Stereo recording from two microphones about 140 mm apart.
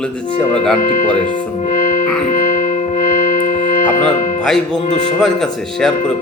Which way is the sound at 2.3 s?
75° left (ahead or behind).